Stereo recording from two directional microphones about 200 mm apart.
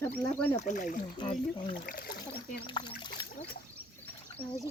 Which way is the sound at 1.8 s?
45° left (ahead or behind).